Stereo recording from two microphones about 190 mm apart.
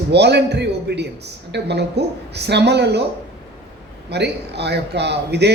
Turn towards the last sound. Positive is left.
turn(degrees=-60)  # may be behind; listen again after turning